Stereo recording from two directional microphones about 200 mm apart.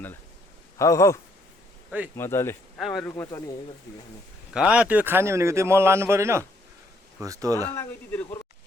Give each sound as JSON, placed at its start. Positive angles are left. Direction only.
{"t": 0.8, "sound": "speech", "side_deg": 15}
{"t": 2.7, "sound": "speech", "side_deg": 0}
{"t": 4.7, "sound": "speech", "side_deg": -5}
{"t": 7.8, "sound": "speech", "side_deg": 15}